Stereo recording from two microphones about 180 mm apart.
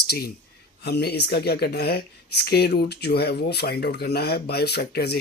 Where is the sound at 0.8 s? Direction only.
65° left (ahead or behind).